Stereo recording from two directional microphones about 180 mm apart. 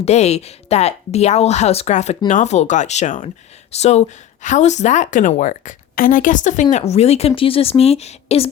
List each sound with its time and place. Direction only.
0.0 s a woman's voice: 35° left (ahead or behind)